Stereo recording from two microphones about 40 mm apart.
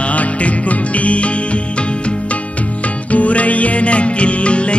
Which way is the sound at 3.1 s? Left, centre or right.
Left.